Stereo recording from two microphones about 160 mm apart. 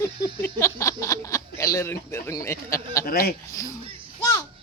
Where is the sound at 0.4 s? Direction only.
20° left (ahead or behind).